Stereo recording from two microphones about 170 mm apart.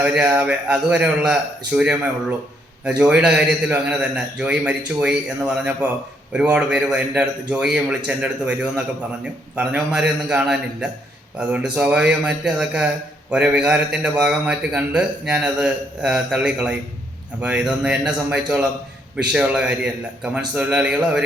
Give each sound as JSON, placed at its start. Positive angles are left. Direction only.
{"t": 0.0, "sound": "a man's voice", "side_deg": -5}